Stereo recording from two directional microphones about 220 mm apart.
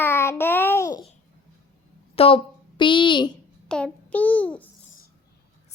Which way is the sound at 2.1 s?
25° left (ahead or behind).